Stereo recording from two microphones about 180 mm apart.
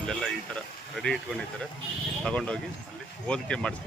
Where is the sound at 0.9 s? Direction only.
Centre (ahead or behind).